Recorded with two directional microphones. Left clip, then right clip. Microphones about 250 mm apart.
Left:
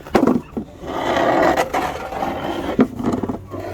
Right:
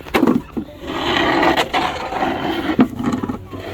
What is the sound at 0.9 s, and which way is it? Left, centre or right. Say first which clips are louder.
Roar: right 1 dB; left.